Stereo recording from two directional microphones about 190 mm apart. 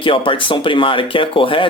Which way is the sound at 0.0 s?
25° left (ahead or behind).